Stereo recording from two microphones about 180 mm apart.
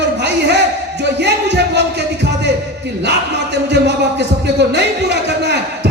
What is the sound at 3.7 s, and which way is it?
Speech, 70° right (ahead or behind).